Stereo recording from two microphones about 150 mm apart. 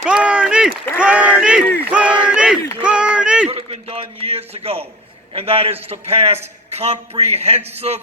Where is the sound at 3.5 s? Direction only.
40° right (ahead or behind).